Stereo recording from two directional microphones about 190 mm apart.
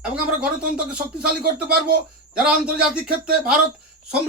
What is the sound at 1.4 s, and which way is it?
Speech, 55° right (ahead or behind).